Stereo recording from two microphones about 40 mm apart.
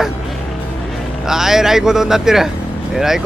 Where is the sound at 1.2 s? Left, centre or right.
Centre.